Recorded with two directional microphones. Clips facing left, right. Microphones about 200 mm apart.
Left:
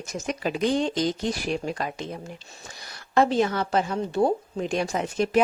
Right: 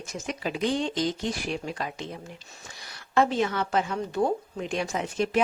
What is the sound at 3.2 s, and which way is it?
A woman's voice, 35° left (ahead or behind).